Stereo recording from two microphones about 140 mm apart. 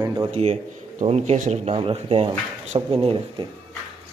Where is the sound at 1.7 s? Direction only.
40° right (ahead or behind).